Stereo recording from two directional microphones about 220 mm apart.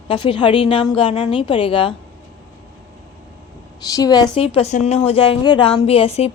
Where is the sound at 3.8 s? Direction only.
15° left (ahead or behind).